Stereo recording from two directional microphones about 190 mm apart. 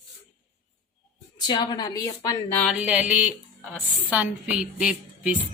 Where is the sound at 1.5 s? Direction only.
20° left (ahead or behind).